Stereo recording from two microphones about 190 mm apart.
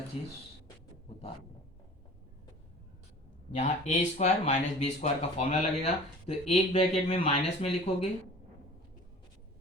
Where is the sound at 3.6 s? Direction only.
40° left (ahead or behind).